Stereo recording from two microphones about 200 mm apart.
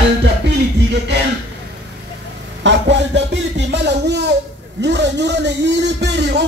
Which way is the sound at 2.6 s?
60° right (ahead or behind).